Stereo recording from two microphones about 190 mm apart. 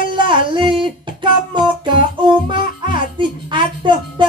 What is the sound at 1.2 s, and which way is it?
Music, 25° right (ahead or behind).